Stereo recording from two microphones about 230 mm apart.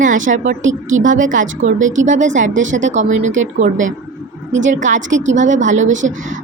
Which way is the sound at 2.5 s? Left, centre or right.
Right.